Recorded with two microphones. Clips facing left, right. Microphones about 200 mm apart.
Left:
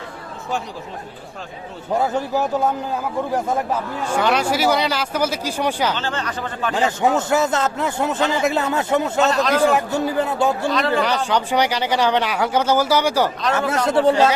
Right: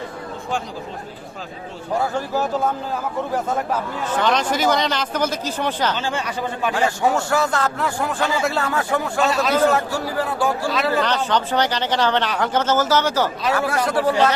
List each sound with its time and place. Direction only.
1.9 s speech: 20° left (ahead or behind)
4.1 s speech: 10° left (ahead or behind)
5.9 s speech: 10° right (ahead or behind)
6.7 s a man's voice: 20° left (ahead or behind)
9.3 s speech: 5° right (ahead or behind)
9.6 s a man's voice: 15° left (ahead or behind)
10.7 s speech: 5° right (ahead or behind)
11.3 s speech: 10° left (ahead or behind)
13.5 s a man's voice: 25° left (ahead or behind)